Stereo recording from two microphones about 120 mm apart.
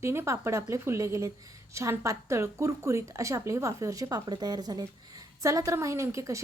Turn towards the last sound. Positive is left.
turn(degrees=-25)  # may be behind; listen again after turning